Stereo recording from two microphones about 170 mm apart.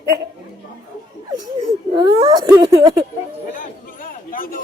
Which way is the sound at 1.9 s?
25° right (ahead or behind).